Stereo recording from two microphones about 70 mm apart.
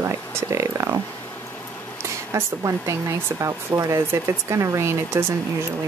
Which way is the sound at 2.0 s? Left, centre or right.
Right.